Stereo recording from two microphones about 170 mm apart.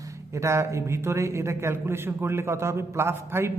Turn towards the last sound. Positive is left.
turn(degrees=-15)  # may be behind; listen again after turning